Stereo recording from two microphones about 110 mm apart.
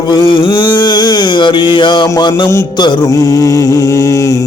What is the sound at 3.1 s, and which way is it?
Mantra, 30° left (ahead or behind).